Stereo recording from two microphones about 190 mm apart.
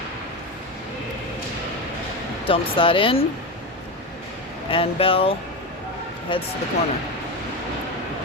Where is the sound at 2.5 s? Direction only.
25° left (ahead or behind).